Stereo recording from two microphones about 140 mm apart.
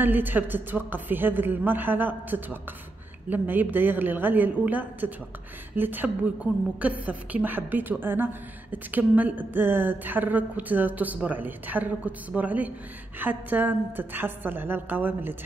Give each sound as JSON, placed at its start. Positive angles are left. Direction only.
{"t": 0.0, "sound": "a woman's voice", "side_deg": -15}